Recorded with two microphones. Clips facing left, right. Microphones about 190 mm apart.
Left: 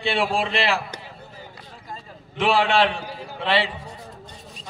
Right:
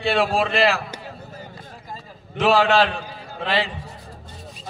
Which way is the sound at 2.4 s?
40° right (ahead or behind).